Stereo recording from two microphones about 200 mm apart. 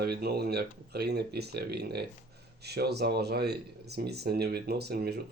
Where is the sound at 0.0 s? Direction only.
55° right (ahead or behind).